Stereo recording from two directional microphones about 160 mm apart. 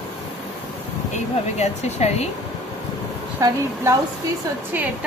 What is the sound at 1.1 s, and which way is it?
Speech, 45° left (ahead or behind).